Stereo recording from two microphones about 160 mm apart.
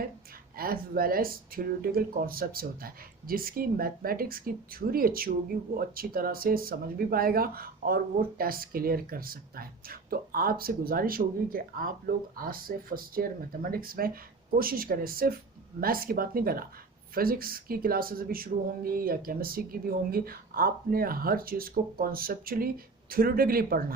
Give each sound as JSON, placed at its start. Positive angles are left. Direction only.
{"t": 0.5, "sound": "speech", "side_deg": -65}